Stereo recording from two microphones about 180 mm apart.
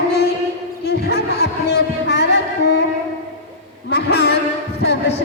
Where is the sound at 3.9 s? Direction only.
65° left (ahead or behind).